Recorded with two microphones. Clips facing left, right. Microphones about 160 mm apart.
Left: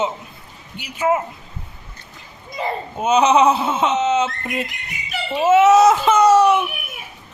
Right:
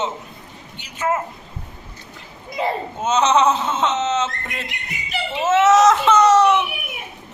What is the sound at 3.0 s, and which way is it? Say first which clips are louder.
Speech: left 3 dB; 10° left (ahead or behind).